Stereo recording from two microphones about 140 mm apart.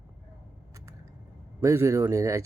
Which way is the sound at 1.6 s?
20° right (ahead or behind).